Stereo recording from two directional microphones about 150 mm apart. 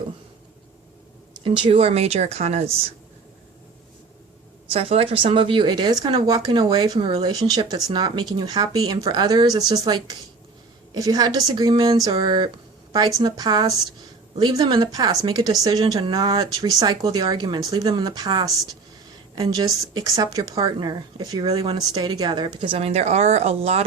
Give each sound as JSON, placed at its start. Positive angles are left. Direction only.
{"t": 1.5, "sound": "speech", "side_deg": -35}
{"t": 4.7, "sound": "a woman's voice", "side_deg": -40}